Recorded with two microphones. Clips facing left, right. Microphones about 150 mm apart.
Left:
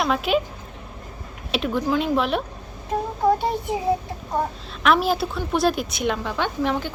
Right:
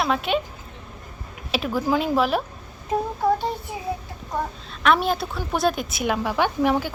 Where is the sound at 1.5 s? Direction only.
Centre (ahead or behind).